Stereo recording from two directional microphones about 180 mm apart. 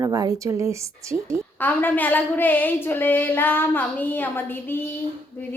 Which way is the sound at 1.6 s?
10° left (ahead or behind).